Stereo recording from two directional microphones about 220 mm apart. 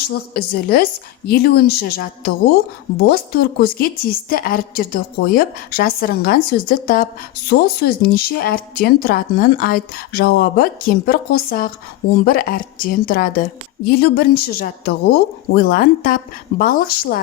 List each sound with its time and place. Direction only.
0.1 s a woman's voice: 45° left (ahead or behind)